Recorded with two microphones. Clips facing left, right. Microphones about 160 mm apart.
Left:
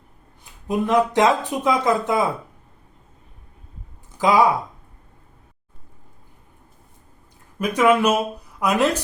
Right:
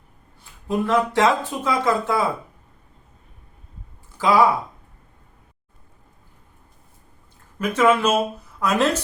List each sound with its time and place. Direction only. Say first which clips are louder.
0.7 s speech: left 1 dB; 20° left (ahead or behind)
4.2 s speech: even; 20° left (ahead or behind)
7.6 s speech: left 1 dB; 15° left (ahead or behind)